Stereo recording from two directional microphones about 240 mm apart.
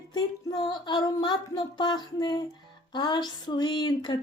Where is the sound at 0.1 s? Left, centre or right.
Centre.